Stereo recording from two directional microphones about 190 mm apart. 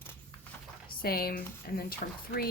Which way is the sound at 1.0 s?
50° left (ahead or behind).